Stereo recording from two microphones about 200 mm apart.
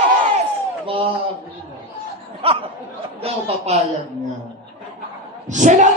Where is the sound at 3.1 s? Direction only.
30° right (ahead or behind).